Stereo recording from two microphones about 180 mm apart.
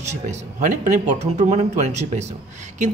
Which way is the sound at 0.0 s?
40° right (ahead or behind).